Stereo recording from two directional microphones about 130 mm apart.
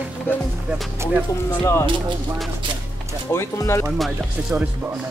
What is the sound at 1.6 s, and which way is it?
Speech, 20° left (ahead or behind).